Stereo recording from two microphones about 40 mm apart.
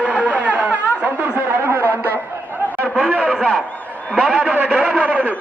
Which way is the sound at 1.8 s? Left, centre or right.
Left.